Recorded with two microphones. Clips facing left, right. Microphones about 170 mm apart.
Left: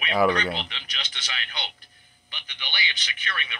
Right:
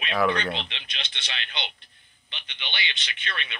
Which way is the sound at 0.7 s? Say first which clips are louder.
Even; 30° right (ahead or behind).